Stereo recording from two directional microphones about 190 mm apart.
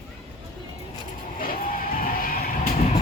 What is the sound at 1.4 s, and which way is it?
Vehicle, 50° left (ahead or behind).